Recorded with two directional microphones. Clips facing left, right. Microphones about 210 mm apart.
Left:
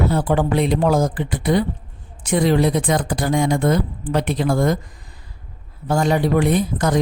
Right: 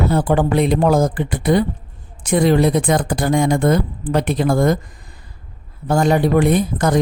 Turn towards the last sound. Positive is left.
turn(degrees=-50)  # may be behind; listen again after turning